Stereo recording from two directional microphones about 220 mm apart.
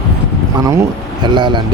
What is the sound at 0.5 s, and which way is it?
Speech, 15° right (ahead or behind).